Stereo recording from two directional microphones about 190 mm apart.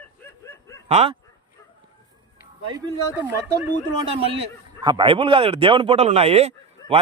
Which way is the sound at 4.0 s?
30° right (ahead or behind).